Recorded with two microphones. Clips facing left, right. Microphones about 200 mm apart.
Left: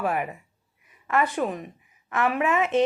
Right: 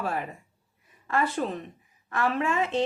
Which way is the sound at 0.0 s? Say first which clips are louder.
Left 4 dB; 20° left (ahead or behind).